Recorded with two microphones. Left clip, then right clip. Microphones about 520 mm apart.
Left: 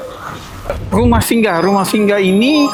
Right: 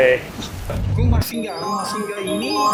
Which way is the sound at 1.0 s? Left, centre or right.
Left.